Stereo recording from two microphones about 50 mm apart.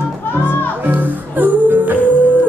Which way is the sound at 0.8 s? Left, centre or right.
Right.